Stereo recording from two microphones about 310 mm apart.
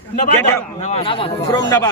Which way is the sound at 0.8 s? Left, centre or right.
Centre.